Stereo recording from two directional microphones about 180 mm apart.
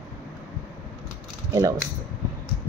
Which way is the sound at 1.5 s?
20° right (ahead or behind).